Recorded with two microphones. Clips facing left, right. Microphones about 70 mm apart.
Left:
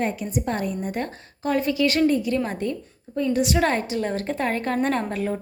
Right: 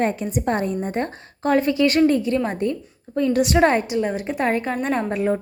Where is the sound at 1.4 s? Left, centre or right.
Right.